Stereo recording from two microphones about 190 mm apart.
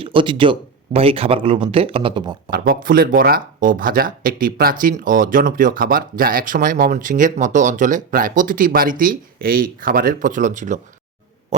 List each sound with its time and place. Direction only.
0.0 s speech: 25° right (ahead or behind)
2.5 s speech: 50° right (ahead or behind)